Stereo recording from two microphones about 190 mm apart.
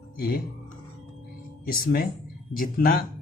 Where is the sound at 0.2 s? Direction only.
55° left (ahead or behind).